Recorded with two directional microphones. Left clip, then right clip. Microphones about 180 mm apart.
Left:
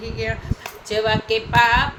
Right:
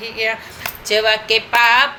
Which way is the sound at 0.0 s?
15° right (ahead or behind).